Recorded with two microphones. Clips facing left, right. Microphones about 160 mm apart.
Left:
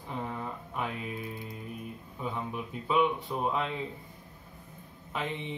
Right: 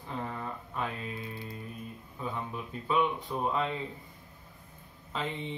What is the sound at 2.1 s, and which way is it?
Speech, 15° left (ahead or behind).